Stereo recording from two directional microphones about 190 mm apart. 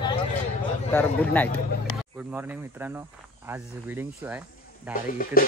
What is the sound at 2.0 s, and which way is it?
Speech, 10° right (ahead or behind).